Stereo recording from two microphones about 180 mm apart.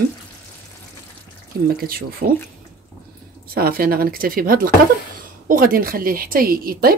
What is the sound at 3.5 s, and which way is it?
A woman's voice, 55° right (ahead or behind).